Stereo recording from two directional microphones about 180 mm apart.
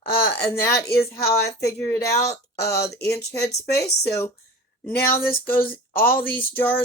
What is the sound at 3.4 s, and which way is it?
Speech, 60° left (ahead or behind).